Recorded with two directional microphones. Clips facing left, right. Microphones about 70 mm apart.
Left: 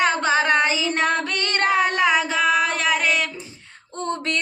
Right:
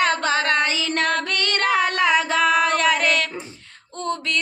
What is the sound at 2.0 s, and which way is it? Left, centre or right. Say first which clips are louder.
Female singing: right 1 dB; centre.